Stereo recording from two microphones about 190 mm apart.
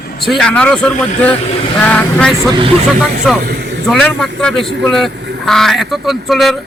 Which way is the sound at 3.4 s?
60° right (ahead or behind).